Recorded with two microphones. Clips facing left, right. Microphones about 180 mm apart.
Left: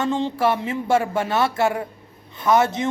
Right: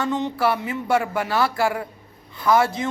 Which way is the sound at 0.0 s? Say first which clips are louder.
Left 1 dB; 30° left (ahead or behind).